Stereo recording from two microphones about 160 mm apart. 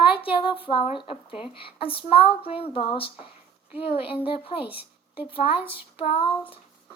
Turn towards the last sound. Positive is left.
turn(degrees=35)  # may be behind; listen again after turning